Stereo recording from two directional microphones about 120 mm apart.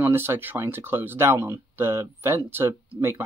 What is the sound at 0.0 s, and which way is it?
Speech, 20° right (ahead or behind).